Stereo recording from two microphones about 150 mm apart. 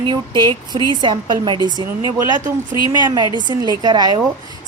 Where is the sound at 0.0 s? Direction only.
30° right (ahead or behind).